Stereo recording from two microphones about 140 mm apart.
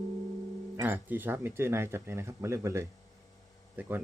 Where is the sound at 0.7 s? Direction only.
15° right (ahead or behind).